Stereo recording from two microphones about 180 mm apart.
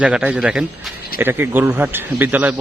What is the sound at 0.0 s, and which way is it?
A man's voice, 5° right (ahead or behind).